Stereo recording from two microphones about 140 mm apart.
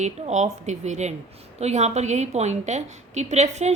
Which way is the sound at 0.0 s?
55° right (ahead or behind).